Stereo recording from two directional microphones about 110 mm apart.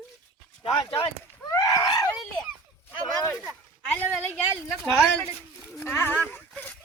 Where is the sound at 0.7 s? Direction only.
50° left (ahead or behind).